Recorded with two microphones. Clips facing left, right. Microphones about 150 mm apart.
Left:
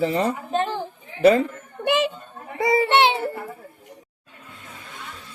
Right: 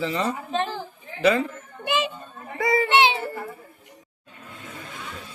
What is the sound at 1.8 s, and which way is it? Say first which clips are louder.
Children playing: left 4 dB; 60° left (ahead or behind).